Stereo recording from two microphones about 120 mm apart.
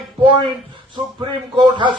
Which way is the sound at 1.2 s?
40° right (ahead or behind).